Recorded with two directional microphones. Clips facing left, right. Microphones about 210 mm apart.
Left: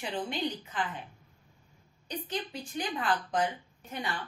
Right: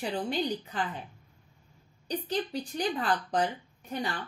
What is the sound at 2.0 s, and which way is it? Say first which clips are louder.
Speech: right 5 dB; 35° right (ahead or behind).